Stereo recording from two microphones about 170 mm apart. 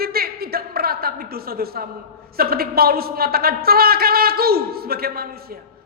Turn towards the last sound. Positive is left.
turn(degrees=-65)  # may be behind; listen again after turning